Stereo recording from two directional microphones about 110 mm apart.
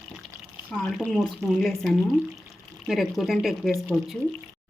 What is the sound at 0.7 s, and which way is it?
Speech, 10° left (ahead or behind).